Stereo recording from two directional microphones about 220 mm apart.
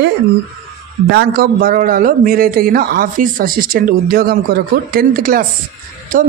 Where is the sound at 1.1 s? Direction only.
45° right (ahead or behind).